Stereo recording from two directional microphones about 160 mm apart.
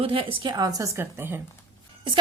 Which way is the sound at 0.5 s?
20° right (ahead or behind).